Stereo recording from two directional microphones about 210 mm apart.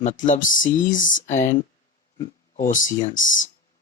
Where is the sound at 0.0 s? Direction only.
35° left (ahead or behind).